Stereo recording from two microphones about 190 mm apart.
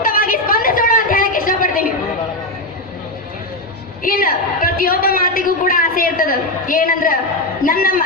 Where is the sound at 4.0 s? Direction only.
50° left (ahead or behind).